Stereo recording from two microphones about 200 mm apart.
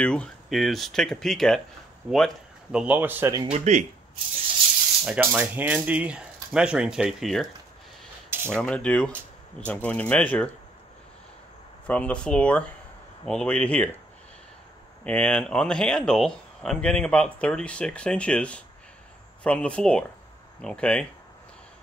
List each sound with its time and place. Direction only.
0.0 s speech: 5° left (ahead or behind); by 3.5 s 10° right (ahead or behind)
3.5 s speech: 35° right (ahead or behind)
5.0 s speech: 5° right (ahead or behind)
8.3 s a sound: 10° right (ahead or behind)
8.5 s speech: 5° left (ahead or behind)
11.8 s speech: 5° left (ahead or behind)
15.0 s speech: 5° left (ahead or behind)